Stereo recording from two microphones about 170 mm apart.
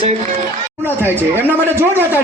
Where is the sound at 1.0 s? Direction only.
10° right (ahead or behind).